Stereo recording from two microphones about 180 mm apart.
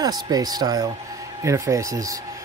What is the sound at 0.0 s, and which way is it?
Speech, 20° right (ahead or behind).